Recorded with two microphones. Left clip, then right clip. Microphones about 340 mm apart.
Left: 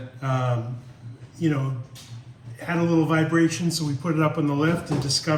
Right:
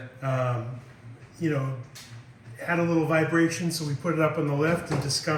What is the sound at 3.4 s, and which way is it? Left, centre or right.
A man's voice, centre.